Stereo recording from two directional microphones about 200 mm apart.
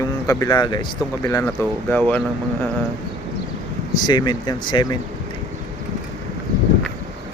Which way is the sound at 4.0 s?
20° left (ahead or behind).